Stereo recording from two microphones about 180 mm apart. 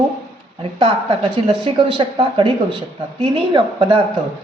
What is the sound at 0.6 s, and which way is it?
Speech, 25° right (ahead or behind).